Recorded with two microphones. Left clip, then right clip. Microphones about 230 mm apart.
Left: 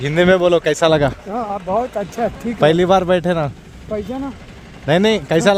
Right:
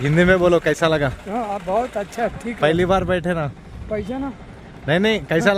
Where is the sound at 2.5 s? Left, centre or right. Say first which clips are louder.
Left 5 dB; centre.